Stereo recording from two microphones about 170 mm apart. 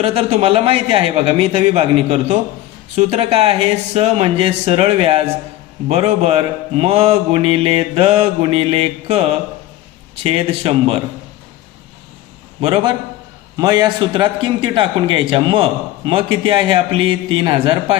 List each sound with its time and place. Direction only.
0.0 s mantra: 35° right (ahead or behind)
10.2 s mantra: 35° right (ahead or behind)
12.6 s a man's voice: 30° right (ahead or behind)